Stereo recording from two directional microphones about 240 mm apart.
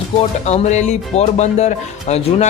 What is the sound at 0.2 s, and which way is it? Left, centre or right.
Speech, left.